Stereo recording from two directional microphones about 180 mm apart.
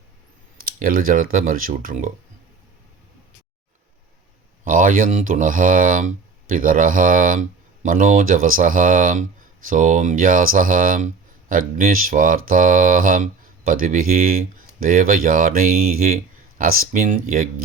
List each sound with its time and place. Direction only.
0.6 s speech: 50° right (ahead or behind)
4.6 s speech: 50° right (ahead or behind)